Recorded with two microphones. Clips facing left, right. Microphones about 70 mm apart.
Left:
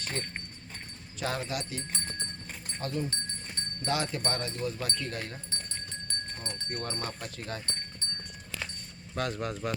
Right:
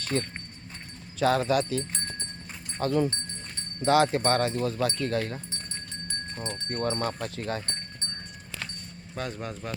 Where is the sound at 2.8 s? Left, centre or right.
Right.